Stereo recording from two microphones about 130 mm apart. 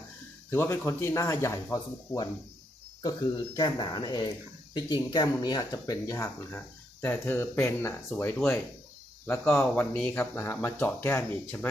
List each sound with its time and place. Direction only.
0.5 s speech: 20° left (ahead or behind)
6.5 s speech: 15° left (ahead or behind)